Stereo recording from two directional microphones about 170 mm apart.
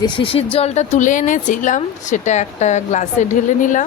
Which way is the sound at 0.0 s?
30° left (ahead or behind).